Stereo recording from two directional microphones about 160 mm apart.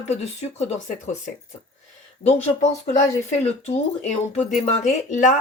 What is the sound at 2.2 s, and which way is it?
Speech, 45° left (ahead or behind).